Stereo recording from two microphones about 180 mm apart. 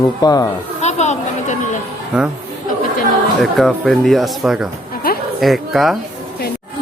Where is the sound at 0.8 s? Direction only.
40° left (ahead or behind).